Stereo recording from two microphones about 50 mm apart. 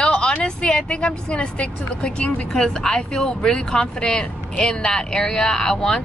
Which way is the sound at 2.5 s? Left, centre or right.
Centre.